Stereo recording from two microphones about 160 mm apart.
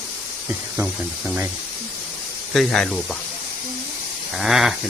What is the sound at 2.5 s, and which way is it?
Speech, centre (ahead or behind).